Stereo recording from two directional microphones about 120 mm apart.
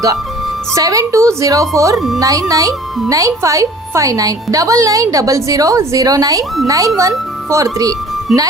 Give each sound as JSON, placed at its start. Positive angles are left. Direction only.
{"t": 0.7, "sound": "a woman's voice", "side_deg": -30}